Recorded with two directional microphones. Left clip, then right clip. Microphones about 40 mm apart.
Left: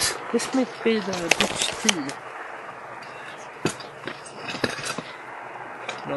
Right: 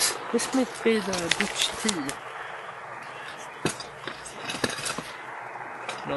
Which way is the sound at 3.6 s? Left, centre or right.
Centre.